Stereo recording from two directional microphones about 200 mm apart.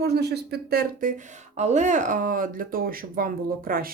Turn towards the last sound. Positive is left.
turn(degrees=-45)  # may be behind; listen again after turning